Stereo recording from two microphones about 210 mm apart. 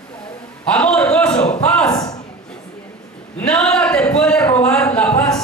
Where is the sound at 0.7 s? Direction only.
5° left (ahead or behind).